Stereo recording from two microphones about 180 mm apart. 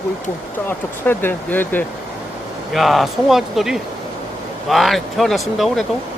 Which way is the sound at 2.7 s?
Centre (ahead or behind).